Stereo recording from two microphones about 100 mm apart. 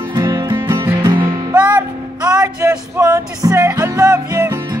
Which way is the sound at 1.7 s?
40° right (ahead or behind).